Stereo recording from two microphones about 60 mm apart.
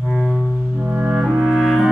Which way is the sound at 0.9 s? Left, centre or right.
Centre.